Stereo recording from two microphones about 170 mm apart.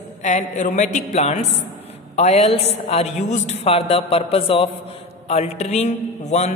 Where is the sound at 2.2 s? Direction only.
40° left (ahead or behind).